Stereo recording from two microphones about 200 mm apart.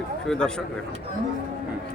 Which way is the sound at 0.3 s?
5° left (ahead or behind).